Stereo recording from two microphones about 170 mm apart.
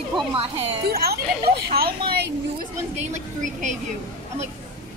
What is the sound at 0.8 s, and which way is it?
Speech, 65° right (ahead or behind).